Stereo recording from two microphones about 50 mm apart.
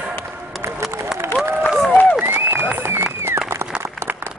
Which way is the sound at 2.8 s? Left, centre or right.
Right.